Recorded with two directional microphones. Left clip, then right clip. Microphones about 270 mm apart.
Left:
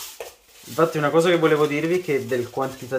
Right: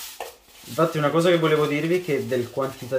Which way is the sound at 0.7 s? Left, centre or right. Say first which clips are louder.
Left 2 dB; centre.